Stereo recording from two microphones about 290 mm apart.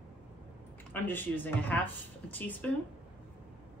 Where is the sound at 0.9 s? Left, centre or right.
Centre.